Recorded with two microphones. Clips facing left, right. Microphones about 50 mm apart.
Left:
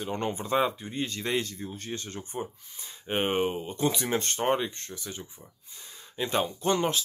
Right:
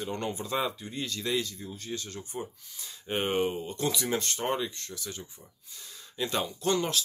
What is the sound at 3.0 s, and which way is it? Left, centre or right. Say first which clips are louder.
Speech: left 1 dB; left.